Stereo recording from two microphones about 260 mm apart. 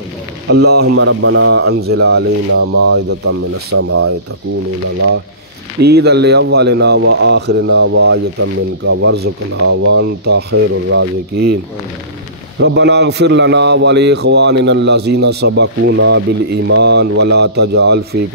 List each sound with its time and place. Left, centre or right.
0.5 s speech: right
1.8 s speech: right
2.7 s speech: right
5.8 s speech: right
12.5 s speech: right